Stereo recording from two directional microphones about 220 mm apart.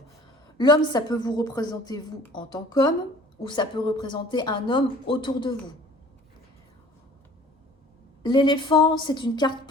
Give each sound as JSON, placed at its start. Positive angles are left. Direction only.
{"t": 0.5, "sound": "a woman's voice", "side_deg": 20}
{"t": 8.2, "sound": "speech", "side_deg": 20}